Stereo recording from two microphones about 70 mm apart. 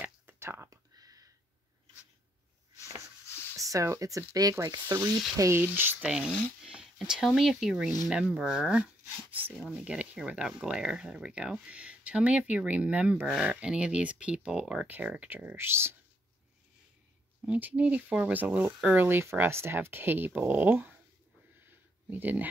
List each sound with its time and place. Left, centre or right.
0.0 s a sound: right
0.7 s clicking: right
3.5 s speech: right
5.6 s speech: right
6.0 s speech: centre
6.6 s a sound: centre
7.3 s speech: centre
9.3 s speech: right
9.7 s speech: centre
14.9 s speech: right
17.5 s speech: right
21.5 s a sound: right